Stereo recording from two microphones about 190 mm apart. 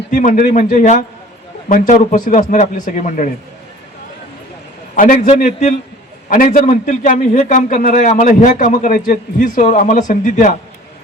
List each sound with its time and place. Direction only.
0.1 s a man's voice: 40° left (ahead or behind)
4.9 s a man's voice: 40° left (ahead or behind)